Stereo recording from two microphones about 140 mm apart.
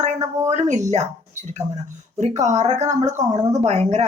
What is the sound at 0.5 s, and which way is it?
Speech, 55° right (ahead or behind).